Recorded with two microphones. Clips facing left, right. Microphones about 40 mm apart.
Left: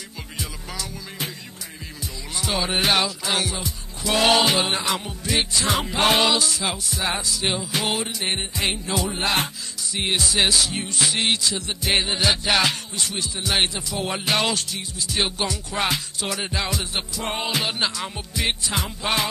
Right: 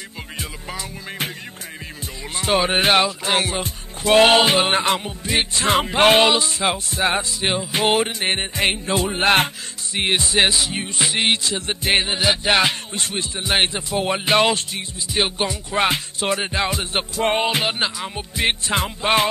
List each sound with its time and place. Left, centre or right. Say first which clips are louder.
0.4 s music: right 2 dB; right
2.3 s speech: right 6 dB; right
4.9 s music: right 3 dB; right
5.6 s speech: right 7 dB; right
9.9 s speech: right 4 dB; right
10.5 s music: even; right
11.9 s music: right 2 dB; centre
12.9 s speech: right 2 dB; right
17.8 s music: right 1 dB; centre
18.3 s speech: right 5 dB; right